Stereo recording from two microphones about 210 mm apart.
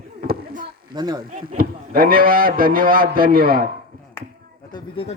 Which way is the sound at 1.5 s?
45° right (ahead or behind).